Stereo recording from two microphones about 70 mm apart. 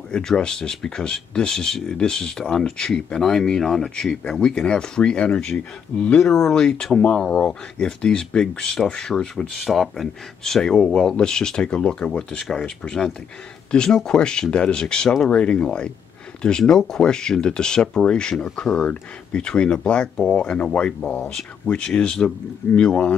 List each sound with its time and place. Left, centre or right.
0.1 s speech: centre